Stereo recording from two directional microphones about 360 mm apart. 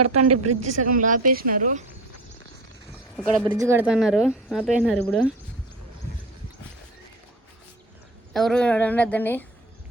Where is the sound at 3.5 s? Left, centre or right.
Centre.